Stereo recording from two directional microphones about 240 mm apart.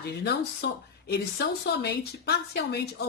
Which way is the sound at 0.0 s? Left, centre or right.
Left.